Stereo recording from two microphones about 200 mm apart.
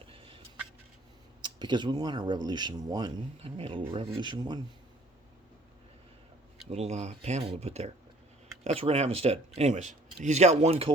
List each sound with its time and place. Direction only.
0.0 s fowl: 25° right (ahead or behind)
1.4 s speech: 20° right (ahead or behind)
6.7 s speech: 35° right (ahead or behind)